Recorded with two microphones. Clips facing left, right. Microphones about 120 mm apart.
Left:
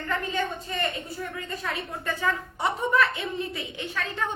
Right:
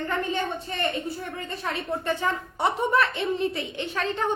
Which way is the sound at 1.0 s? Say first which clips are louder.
Right 2 dB; 30° right (ahead or behind).